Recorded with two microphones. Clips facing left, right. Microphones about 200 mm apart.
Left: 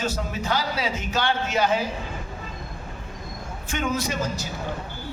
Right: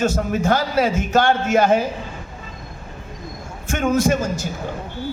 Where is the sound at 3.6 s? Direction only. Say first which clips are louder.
Right 9 dB; 50° right (ahead or behind).